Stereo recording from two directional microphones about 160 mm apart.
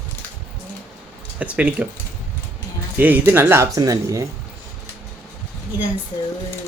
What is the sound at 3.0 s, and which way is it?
Speech, 10° right (ahead or behind).